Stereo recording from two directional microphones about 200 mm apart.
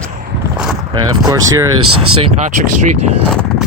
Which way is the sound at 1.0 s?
20° right (ahead or behind).